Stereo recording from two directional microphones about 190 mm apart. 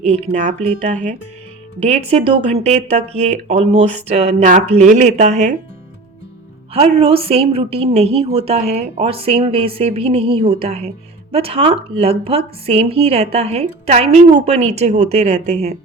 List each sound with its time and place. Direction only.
0.0 s a woman's voice: 35° right (ahead or behind)
6.7 s a woman's voice: 30° right (ahead or behind)